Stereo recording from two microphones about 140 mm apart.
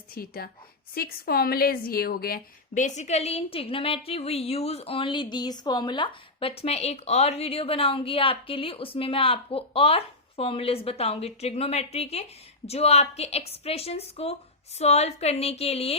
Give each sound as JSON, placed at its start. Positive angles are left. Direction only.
{"t": 0.1, "sound": "a woman's voice", "side_deg": 90}